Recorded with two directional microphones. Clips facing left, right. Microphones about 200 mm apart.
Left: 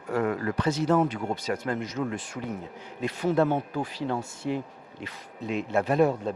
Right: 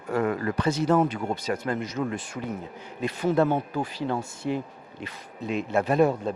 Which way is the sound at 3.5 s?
25° right (ahead or behind).